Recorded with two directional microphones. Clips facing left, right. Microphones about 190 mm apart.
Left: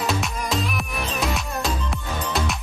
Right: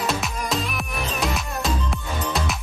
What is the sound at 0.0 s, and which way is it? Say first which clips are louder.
Music: even; centre (ahead or behind).